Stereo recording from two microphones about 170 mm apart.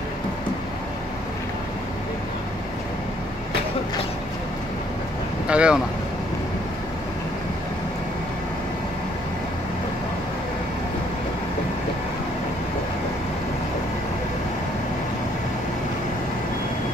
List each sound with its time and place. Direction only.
5.5 s speech: 5° right (ahead or behind)